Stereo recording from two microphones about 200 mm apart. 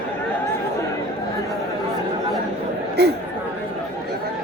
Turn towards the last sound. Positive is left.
turn(degrees=-55)  # may be behind; listen again after turning